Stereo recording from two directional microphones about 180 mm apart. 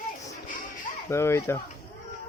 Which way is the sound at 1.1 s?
15° left (ahead or behind).